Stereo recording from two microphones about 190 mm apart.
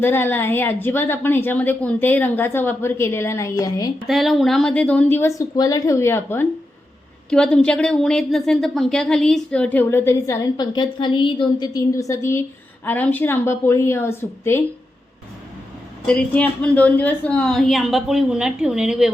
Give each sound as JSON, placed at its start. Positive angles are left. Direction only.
{"t": 0.0, "sound": "a woman's voice", "side_deg": 10}
{"t": 4.0, "sound": "a woman's voice", "side_deg": 0}
{"t": 16.0, "sound": "a woman's voice", "side_deg": 5}